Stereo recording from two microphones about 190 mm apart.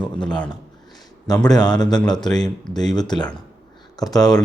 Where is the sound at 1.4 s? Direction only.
20° left (ahead or behind).